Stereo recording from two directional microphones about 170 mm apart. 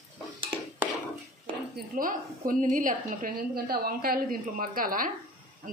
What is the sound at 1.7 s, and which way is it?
A woman's voice, 55° right (ahead or behind).